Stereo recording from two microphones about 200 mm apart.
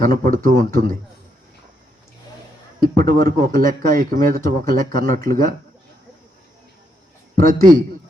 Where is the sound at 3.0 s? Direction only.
45° right (ahead or behind).